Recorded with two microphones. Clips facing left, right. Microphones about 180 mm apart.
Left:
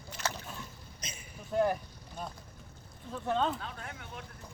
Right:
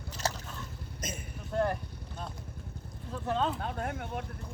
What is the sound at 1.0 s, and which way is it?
Vehicle, 50° right (ahead or behind).